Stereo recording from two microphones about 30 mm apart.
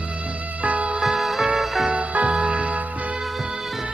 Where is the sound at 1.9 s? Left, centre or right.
Right.